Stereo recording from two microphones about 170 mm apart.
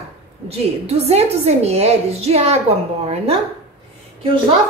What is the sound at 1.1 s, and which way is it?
A woman's voice, 40° right (ahead or behind).